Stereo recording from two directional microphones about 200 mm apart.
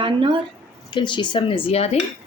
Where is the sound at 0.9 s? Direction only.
25° left (ahead or behind).